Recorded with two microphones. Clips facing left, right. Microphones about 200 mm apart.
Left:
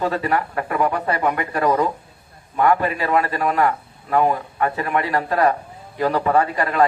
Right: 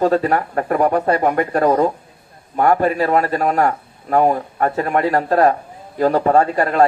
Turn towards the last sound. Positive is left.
turn(degrees=-45)  # may be behind; listen again after turning